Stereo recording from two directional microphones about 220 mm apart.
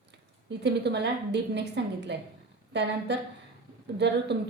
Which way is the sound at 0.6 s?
50° right (ahead or behind).